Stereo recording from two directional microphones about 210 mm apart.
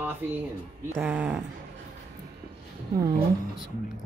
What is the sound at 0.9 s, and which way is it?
Speech, 10° right (ahead or behind).